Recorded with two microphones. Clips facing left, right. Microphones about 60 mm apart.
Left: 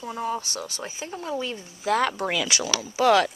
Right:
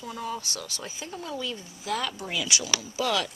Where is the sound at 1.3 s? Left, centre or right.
Left.